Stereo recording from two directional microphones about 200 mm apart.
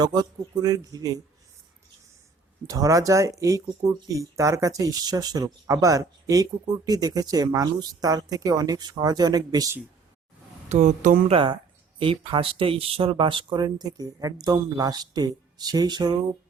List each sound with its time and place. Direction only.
0.0 s speech: 20° right (ahead or behind)
2.6 s speech: 15° right (ahead or behind)
10.7 s speech: 40° right (ahead or behind)
11.9 s speech: 25° right (ahead or behind)